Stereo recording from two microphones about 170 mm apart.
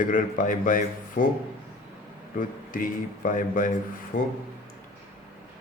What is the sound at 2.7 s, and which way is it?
Speech, 55° left (ahead or behind).